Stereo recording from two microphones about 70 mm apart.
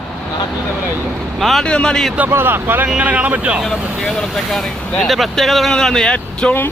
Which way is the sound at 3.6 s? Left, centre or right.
Centre.